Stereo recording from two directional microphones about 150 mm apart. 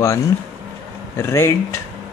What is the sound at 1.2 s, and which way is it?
Speech, 15° left (ahead or behind).